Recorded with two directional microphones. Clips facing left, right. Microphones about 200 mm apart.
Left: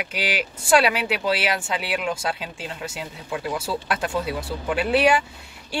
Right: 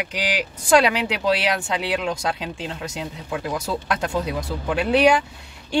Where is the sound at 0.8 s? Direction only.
20° right (ahead or behind).